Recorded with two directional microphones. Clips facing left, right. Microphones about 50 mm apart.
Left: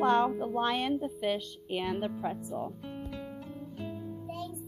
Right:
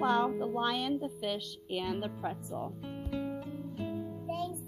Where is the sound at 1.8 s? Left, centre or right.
Centre.